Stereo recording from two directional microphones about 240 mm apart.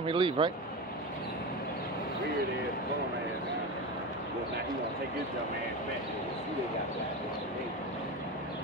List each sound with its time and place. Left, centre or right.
0.0 s speech: right